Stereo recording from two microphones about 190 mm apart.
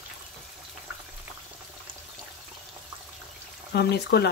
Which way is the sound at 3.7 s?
60° left (ahead or behind).